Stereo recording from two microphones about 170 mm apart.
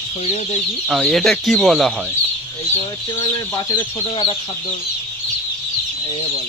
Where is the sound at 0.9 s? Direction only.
Centre (ahead or behind).